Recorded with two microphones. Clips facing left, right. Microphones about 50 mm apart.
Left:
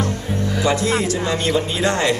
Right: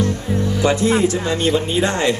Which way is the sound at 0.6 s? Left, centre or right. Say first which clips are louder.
Right 3 dB; right.